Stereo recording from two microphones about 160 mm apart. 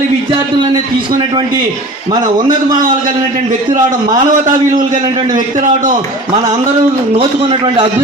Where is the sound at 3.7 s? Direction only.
55° right (ahead or behind).